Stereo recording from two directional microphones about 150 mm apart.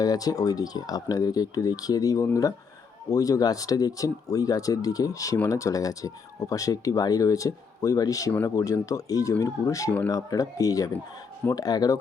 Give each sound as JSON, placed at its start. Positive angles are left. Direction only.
{"t": 0.0, "sound": "speech", "side_deg": 25}